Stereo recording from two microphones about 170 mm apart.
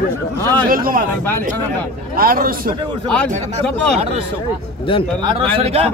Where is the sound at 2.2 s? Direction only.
60° right (ahead or behind).